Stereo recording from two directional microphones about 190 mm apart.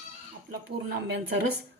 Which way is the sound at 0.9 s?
55° right (ahead or behind).